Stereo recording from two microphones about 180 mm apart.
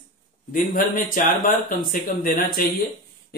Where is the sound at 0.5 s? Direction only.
50° left (ahead or behind).